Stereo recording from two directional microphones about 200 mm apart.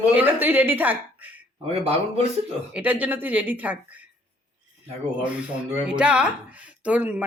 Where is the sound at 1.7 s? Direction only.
30° right (ahead or behind).